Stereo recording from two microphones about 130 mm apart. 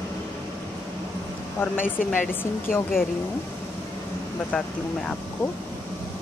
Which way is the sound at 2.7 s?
90° left.